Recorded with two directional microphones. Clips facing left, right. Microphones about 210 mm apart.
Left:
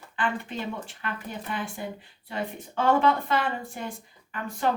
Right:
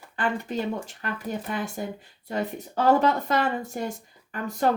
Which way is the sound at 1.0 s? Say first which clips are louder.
Right 3 dB; 40° right (ahead or behind).